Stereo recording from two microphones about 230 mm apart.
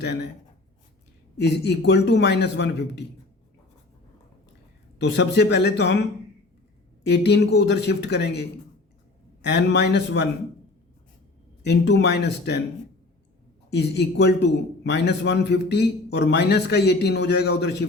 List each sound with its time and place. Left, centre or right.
0.0 s a man's voice: left
1.4 s a man's voice: left
5.0 s a man's voice: left
7.1 s a man's voice: left
11.6 s a man's voice: left
13.7 s a man's voice: left